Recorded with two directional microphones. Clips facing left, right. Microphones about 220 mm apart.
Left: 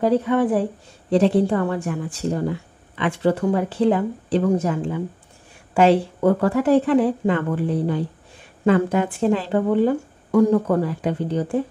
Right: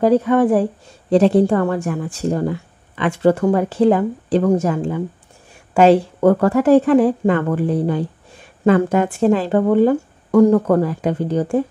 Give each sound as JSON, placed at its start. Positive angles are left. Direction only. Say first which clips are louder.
{"t": 0.3, "sound": "a woman's voice", "louder": "right 4 dB", "side_deg": -50}
{"t": 6.2, "sound": "a woman's voice", "louder": "right 4 dB", "side_deg": -50}
{"t": 7.4, "sound": "a woman's voice", "louder": "right 4 dB", "side_deg": -55}